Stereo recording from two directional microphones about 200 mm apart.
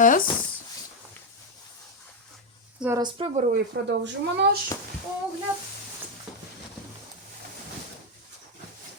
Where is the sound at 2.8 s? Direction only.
10° right (ahead or behind).